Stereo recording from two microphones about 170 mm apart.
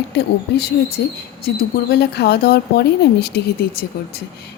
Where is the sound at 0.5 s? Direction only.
70° left (ahead or behind).